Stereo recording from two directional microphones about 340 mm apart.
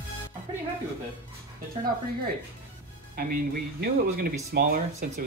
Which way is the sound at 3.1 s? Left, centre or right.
Right.